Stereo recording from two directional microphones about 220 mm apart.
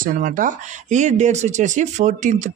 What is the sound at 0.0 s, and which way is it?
Speech, 40° right (ahead or behind).